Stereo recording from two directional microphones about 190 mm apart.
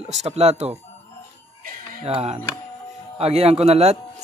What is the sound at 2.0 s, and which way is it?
Speech, 30° right (ahead or behind).